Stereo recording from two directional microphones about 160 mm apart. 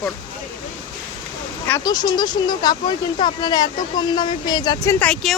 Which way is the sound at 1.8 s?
25° left (ahead or behind).